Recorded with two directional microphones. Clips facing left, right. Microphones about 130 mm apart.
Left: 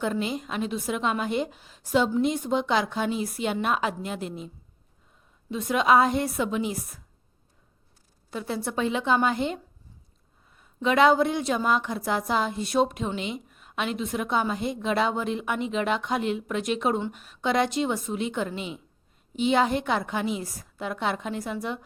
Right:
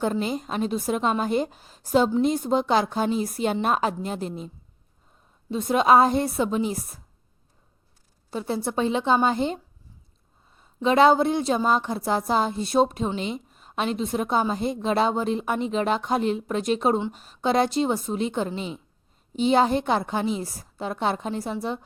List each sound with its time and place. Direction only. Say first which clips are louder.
0.0 s a woman's voice: right 2 dB; 40° right (ahead or behind)
5.5 s a woman's voice: right 3 dB; 35° right (ahead or behind)
8.3 s a woman's voice: right 3 dB; 30° right (ahead or behind)